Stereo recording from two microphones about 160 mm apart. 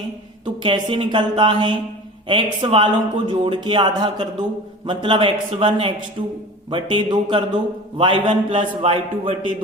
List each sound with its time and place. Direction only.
0.4 s a man's voice: 30° right (ahead or behind)